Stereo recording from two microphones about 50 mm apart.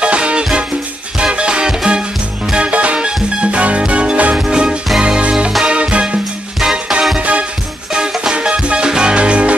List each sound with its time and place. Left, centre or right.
0.0 s music: right
7.2 s music: right
7.9 s music: centre